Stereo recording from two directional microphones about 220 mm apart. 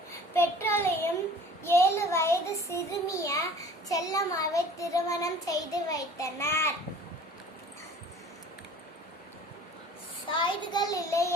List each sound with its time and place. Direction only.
0.3 s child singing: 10° left (ahead or behind)
10.3 s a child's voice: 20° left (ahead or behind)